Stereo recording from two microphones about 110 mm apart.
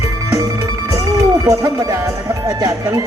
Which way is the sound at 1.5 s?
30° right (ahead or behind).